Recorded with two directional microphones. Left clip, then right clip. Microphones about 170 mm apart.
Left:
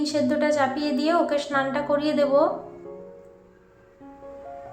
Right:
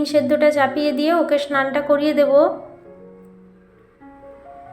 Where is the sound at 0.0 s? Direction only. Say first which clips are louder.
Right 8 dB; 20° right (ahead or behind).